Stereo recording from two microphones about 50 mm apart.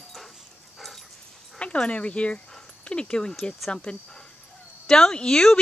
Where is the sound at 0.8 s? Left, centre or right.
Centre.